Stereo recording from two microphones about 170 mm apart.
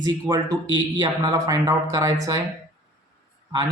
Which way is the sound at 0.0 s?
20° right (ahead or behind).